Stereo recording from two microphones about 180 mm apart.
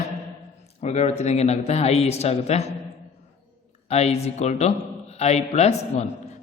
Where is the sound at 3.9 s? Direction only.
35° left (ahead or behind).